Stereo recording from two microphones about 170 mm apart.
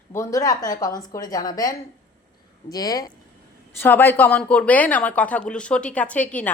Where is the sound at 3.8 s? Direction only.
10° left (ahead or behind).